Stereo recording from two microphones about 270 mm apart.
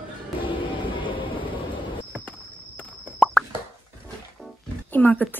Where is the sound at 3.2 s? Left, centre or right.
Centre.